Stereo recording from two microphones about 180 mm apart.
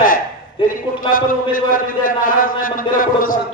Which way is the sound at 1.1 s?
50° left (ahead or behind).